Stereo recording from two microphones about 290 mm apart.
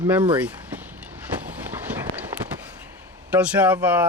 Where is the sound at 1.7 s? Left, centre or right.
Centre.